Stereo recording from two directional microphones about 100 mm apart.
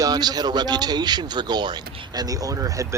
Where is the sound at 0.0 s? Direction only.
40° right (ahead or behind).